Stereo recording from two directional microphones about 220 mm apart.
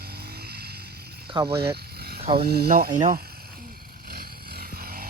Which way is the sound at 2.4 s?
45° right (ahead or behind).